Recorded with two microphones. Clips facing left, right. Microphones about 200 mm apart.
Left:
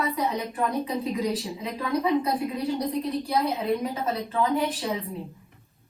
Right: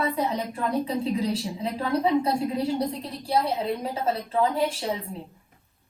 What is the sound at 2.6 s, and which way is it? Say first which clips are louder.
A woman's voice: even; 30° right (ahead or behind).